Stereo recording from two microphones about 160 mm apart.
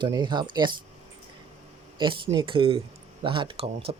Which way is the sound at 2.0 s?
30° right (ahead or behind).